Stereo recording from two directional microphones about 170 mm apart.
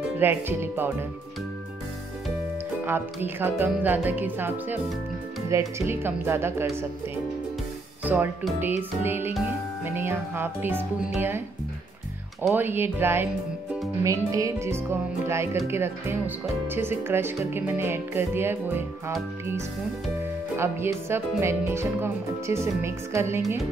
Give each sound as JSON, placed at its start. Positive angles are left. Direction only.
{"t": 0.2, "sound": "speech", "side_deg": -10}
{"t": 2.8, "sound": "speech", "side_deg": -10}
{"t": 8.0, "sound": "speech", "side_deg": -10}
{"t": 12.5, "sound": "speech", "side_deg": -10}
{"t": 20.5, "sound": "speech", "side_deg": -15}